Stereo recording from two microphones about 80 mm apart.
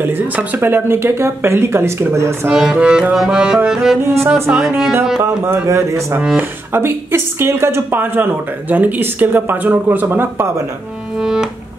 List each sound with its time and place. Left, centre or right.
0.0 s speech: right
2.5 s music: centre
4.0 s speech: right
4.6 s music: centre
5.2 s speech: right
11.1 s music: centre